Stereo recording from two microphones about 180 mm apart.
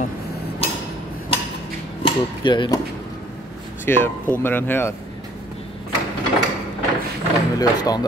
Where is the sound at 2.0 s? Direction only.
25° left (ahead or behind).